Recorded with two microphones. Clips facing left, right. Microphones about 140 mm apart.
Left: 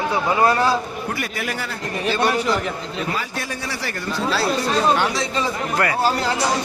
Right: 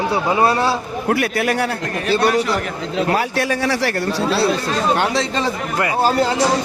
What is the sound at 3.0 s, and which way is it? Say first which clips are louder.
Speech: right 11 dB; 70° right (ahead or behind).